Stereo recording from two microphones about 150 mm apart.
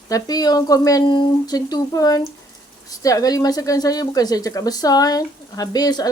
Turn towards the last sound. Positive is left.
turn(degrees=25)  # may be behind; listen again after turning